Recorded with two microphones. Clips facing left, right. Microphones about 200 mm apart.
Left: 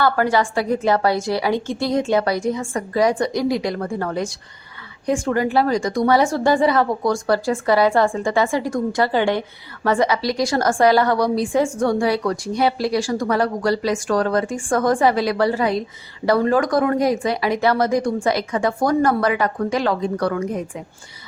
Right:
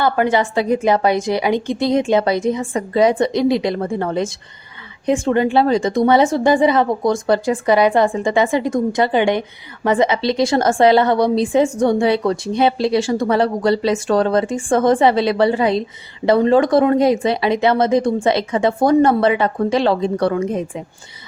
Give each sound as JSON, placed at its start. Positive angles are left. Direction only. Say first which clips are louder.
{"t": 0.0, "sound": "a woman's voice", "louder": "right 2 dB", "side_deg": -20}